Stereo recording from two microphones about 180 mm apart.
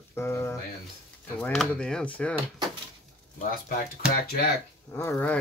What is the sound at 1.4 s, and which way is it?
Speech, 5° left (ahead or behind).